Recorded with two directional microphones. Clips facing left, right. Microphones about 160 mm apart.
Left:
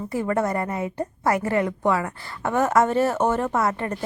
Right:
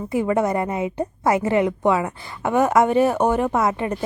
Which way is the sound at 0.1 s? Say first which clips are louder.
Right 4 dB; 15° right (ahead or behind).